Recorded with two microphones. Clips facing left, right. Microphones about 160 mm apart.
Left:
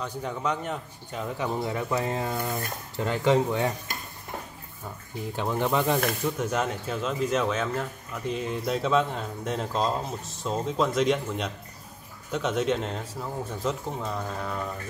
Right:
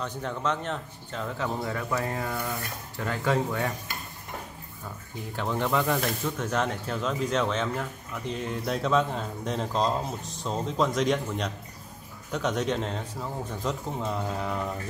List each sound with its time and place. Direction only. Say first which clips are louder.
0.0 s a man's voice: even; 10° left (ahead or behind)
5.3 s a man's voice: left 1 dB; 15° left (ahead or behind)
13.9 s speech: right 2 dB; 10° right (ahead or behind)